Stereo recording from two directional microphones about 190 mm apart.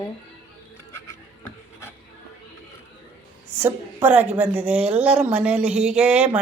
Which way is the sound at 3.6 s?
10° right (ahead or behind).